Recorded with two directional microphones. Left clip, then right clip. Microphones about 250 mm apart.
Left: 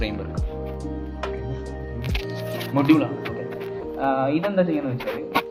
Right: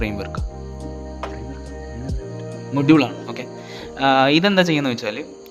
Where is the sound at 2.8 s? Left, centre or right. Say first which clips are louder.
Right 4 dB; right.